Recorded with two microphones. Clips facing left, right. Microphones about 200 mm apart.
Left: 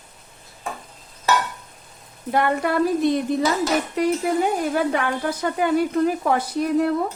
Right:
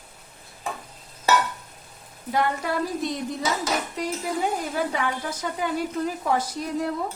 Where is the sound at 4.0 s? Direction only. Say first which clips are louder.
Left 7 dB; 65° left (ahead or behind).